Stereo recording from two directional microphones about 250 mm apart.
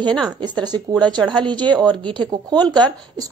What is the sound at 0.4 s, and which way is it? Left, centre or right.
Speech, centre.